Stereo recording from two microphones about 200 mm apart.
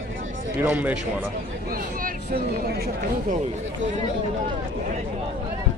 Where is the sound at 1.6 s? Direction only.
45° right (ahead or behind).